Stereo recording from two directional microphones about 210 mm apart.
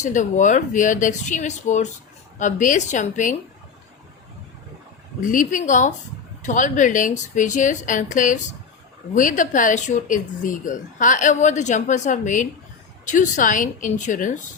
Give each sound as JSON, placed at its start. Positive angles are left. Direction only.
{"t": 0.0, "sound": "speech", "side_deg": 35}
{"t": 5.2, "sound": "speech", "side_deg": 40}